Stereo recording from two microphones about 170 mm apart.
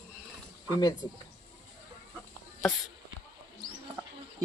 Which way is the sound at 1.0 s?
30° left (ahead or behind).